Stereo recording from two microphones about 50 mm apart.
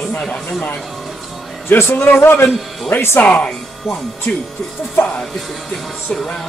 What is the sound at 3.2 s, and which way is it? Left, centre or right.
Speech, left.